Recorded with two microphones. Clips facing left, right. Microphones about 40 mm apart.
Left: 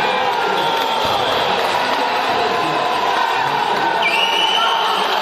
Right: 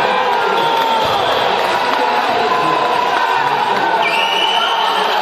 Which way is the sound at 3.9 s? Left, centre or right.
Centre.